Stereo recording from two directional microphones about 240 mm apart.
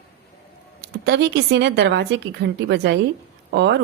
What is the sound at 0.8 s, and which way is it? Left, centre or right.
Speech, right.